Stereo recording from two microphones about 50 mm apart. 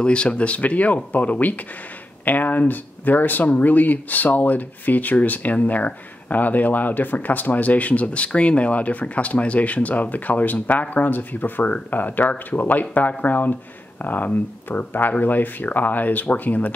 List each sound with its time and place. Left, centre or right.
0.0 s speech: left